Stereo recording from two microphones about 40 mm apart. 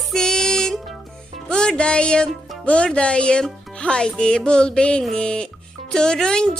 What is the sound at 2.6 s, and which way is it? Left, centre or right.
Speech, left.